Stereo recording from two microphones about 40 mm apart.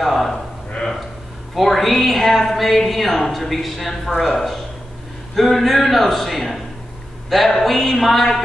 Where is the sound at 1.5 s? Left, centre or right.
Centre.